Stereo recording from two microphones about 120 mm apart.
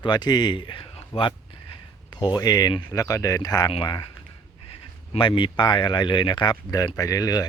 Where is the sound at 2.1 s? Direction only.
35° left (ahead or behind).